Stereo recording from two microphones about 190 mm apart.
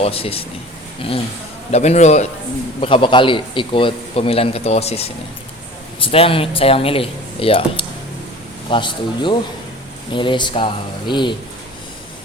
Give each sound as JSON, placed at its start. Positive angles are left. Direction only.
{"t": 0.0, "sound": "a man's voice", "side_deg": 30}
{"t": 1.7, "sound": "a man's voice", "side_deg": 35}